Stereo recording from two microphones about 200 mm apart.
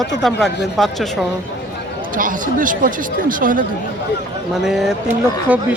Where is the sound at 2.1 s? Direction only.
40° right (ahead or behind).